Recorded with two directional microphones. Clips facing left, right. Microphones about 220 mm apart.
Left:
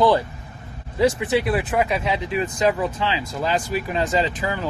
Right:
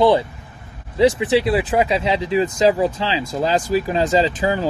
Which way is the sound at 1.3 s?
25° right (ahead or behind).